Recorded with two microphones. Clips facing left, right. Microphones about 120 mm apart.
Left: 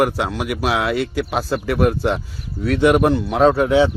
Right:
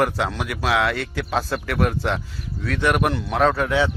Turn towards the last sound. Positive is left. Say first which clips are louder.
# left 5 dB
turn(degrees=20)  # may be behind; listen again after turning